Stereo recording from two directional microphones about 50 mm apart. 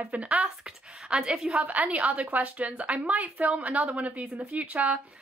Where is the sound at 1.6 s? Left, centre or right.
Right.